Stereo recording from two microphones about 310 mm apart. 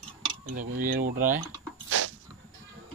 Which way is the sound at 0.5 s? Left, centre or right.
Right.